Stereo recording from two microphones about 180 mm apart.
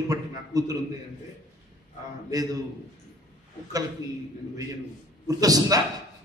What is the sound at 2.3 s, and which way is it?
Speech, 20° right (ahead or behind).